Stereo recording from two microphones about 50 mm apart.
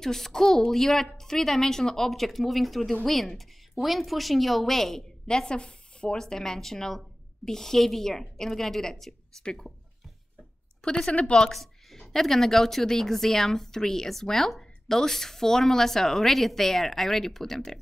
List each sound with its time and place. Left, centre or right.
0.0 s a woman's voice: centre
6.2 s a woman's voice: centre
10.8 s a woman's voice: centre
11.5 s a woman's voice: centre